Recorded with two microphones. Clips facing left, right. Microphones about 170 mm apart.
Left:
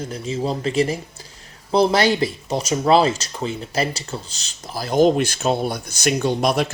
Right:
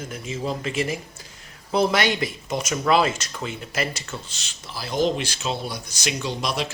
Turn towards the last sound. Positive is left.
turn(degrees=50)  # may be behind; listen again after turning